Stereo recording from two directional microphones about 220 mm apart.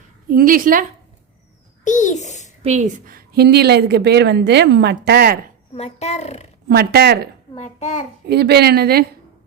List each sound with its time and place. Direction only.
0.3 s a woman's voice: 40° right (ahead or behind)
1.8 s a child's voice: 35° left (ahead or behind)
2.6 s a woman's voice: 30° right (ahead or behind)
5.7 s speech: 30° left (ahead or behind)
6.7 s a woman's voice: 45° right (ahead or behind)
7.5 s a child's voice: 30° left (ahead or behind)
8.3 s a woman's voice: 50° right (ahead or behind)